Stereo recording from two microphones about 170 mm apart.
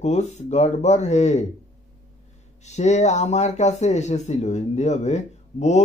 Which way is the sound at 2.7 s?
40° left (ahead or behind).